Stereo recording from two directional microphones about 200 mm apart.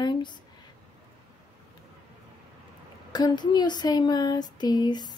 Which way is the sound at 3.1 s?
20° left (ahead or behind).